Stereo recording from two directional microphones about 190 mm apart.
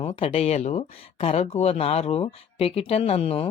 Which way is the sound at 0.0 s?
30° left (ahead or behind).